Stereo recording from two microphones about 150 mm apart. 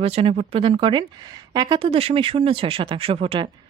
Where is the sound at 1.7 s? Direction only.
40° right (ahead or behind).